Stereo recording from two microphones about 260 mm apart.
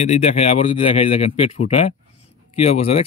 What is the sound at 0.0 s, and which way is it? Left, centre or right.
Speech, left.